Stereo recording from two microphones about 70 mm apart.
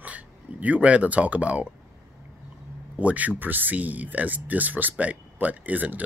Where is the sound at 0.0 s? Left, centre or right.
Right.